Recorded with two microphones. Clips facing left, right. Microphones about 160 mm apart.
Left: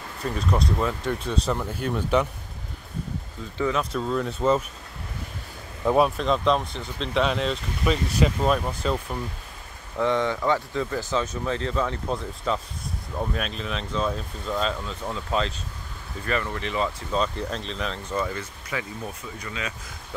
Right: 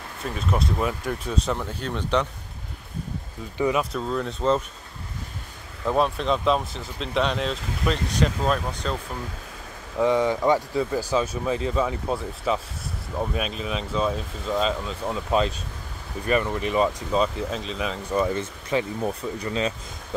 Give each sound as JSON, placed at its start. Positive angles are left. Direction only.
{"t": 0.2, "sound": "speech", "side_deg": -5}
{"t": 1.5, "sound": "speech", "side_deg": 5}
{"t": 3.5, "sound": "speech", "side_deg": -15}
{"t": 3.9, "sound": "speech", "side_deg": 0}
{"t": 5.9, "sound": "speech", "side_deg": 10}
{"t": 9.9, "sound": "speech", "side_deg": -15}
{"t": 17.2, "sound": "speech", "side_deg": -5}
{"t": 18.2, "sound": "speech", "side_deg": -25}